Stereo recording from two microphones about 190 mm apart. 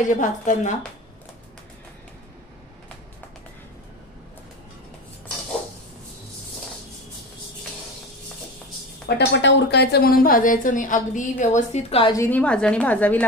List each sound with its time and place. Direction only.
0.0 s a woman's voice: 40° left (ahead or behind)
9.3 s speech: 70° left (ahead or behind); by 12.1 s 35° left (ahead or behind)
12.1 s a woman's voice: 10° left (ahead or behind)